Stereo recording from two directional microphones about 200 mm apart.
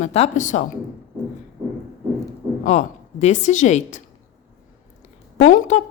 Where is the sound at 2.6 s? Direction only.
35° left (ahead or behind).